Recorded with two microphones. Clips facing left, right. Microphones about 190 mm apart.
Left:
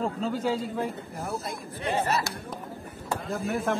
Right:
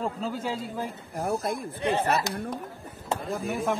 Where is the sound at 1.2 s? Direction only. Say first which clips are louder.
Right 6 dB; 55° right (ahead or behind).